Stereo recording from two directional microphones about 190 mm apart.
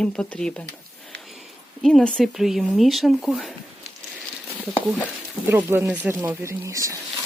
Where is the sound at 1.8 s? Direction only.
5° left (ahead or behind).